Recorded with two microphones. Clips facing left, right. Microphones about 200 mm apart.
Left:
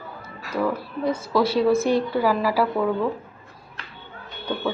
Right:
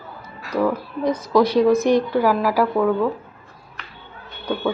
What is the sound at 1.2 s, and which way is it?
Speech, 15° right (ahead or behind).